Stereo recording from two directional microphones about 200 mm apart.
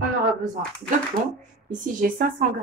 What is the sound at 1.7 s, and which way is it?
Speech, 40° right (ahead or behind).